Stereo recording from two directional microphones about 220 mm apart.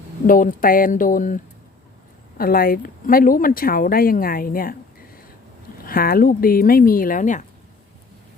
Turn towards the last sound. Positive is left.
turn(degrees=35)  # may be behind; listen again after turning